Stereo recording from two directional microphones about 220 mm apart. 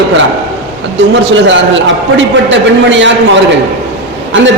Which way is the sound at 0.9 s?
55° right (ahead or behind).